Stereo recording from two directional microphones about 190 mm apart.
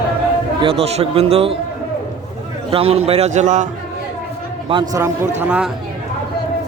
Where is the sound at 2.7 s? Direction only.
30° right (ahead or behind).